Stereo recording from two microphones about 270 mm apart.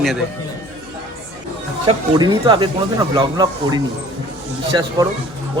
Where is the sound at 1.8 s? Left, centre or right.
Centre.